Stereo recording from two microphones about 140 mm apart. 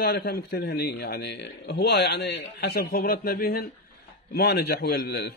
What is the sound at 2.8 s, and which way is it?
A man's voice, 90° left.